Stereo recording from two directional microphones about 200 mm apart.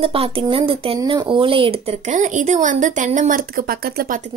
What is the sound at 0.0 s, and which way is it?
Speech, 30° right (ahead or behind).